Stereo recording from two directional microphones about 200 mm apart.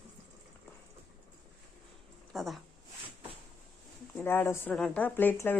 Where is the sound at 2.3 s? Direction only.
Centre (ahead or behind).